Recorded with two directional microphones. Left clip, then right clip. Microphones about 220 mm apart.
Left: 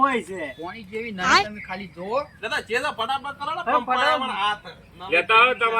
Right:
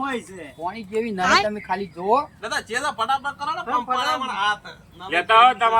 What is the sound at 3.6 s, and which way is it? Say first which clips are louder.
Speech: left 3 dB; 20° left (ahead or behind).